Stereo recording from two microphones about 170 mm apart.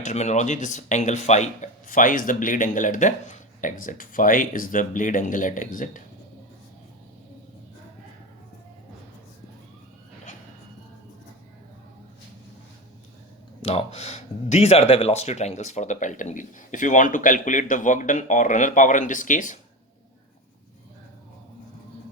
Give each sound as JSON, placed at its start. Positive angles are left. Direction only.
{"t": 0.0, "sound": "speech", "side_deg": 45}
{"t": 13.6, "sound": "speech", "side_deg": 35}